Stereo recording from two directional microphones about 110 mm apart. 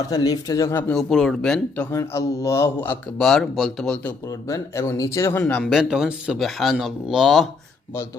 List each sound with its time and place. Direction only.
0.1 s speech: 35° left (ahead or behind)
0.9 s speech: 5° left (ahead or behind)
1.7 s speech: 20° left (ahead or behind)
3.2 s speech: 5° left (ahead or behind)
4.3 s speech: 30° left (ahead or behind)
5.4 s speech: 10° left (ahead or behind)
5.7 s speech: 5° right (ahead or behind)